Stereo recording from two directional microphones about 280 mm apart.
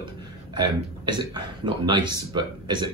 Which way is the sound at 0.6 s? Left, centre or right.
Centre.